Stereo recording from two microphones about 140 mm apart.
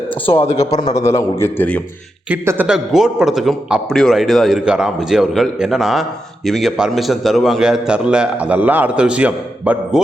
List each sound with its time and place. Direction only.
0.3 s speech: 45° left (ahead or behind)
0.7 s a man's voice: 25° left (ahead or behind)
2.3 s speech: 15° right (ahead or behind)
2.6 s a man's voice: 5° right (ahead or behind)